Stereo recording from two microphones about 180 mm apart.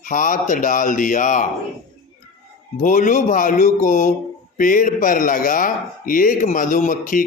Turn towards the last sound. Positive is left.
turn(degrees=50)  # may be behind; listen again after turning